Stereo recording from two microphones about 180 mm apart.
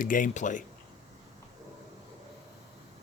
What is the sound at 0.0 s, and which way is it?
Speech, 50° left (ahead or behind).